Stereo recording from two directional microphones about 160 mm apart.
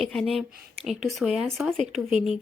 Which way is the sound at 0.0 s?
Centre (ahead or behind).